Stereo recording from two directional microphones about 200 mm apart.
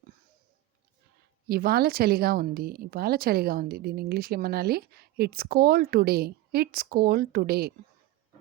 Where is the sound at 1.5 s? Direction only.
50° right (ahead or behind).